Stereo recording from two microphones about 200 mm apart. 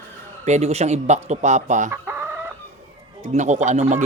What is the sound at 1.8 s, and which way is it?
Chicken, 10° right (ahead or behind).